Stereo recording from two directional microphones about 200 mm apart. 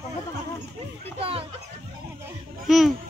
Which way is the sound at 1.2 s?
30° right (ahead or behind).